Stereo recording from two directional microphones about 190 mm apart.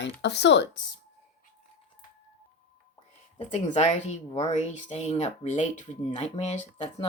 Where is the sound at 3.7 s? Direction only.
35° left (ahead or behind).